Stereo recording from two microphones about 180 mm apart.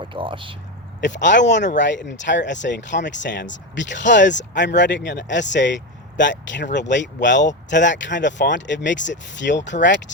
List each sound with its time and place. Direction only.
0.0 s speech: 30° right (ahead or behind)
1.0 s speech: 80° left